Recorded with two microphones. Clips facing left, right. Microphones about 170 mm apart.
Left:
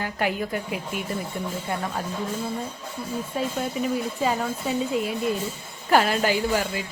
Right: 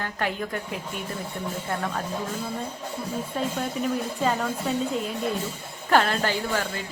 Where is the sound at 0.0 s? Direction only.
10° left (ahead or behind).